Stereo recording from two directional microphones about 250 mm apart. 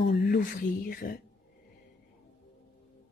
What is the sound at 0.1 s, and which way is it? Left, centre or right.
Speech, left.